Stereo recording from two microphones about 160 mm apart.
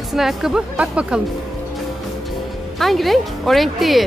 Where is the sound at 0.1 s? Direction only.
Centre (ahead or behind).